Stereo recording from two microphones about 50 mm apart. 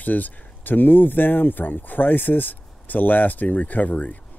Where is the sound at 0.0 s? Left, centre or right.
Left.